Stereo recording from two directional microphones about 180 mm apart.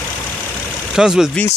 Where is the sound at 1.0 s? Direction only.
5° right (ahead or behind).